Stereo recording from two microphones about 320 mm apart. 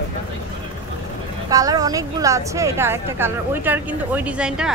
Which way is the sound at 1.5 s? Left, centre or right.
Centre.